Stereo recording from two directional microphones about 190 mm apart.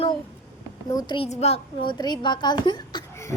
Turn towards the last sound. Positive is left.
turn(degrees=20)  # may be behind; listen again after turning